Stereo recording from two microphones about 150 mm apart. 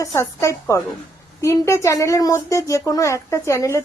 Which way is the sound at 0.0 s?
20° left (ahead or behind).